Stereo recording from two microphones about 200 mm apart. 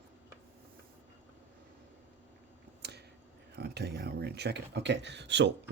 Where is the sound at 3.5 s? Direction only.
55° right (ahead or behind).